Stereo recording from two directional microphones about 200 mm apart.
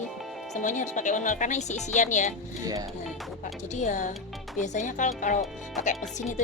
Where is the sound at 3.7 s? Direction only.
35° left (ahead or behind).